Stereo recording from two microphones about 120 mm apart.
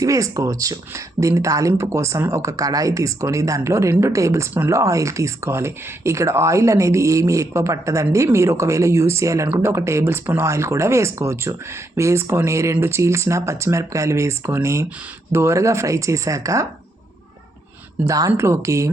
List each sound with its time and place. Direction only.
0.0 s speech: 25° right (ahead or behind)
18.0 s speech: 30° right (ahead or behind)